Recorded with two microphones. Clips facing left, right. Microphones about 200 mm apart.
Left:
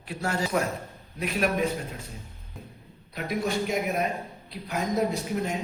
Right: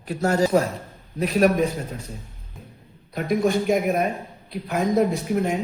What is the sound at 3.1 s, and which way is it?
Speech, 45° right (ahead or behind).